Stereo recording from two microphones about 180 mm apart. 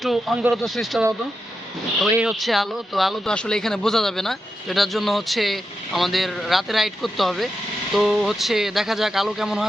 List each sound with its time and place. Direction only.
0.0 s speech: centre (ahead or behind)
2.1 s speech: centre (ahead or behind)